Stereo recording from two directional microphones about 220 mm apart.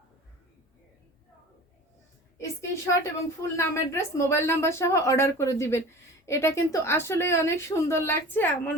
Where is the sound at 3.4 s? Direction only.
10° left (ahead or behind).